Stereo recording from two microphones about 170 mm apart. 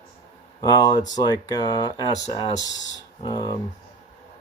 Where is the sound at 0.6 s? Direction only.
20° left (ahead or behind).